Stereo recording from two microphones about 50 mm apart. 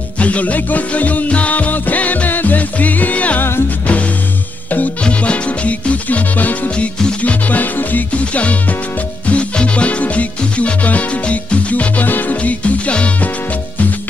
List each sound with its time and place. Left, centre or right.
0.2 s music: left
3.3 s music: left
4.6 s music: left
5.0 s music: left